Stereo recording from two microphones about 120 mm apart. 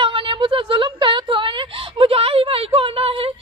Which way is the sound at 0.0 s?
45° right (ahead or behind).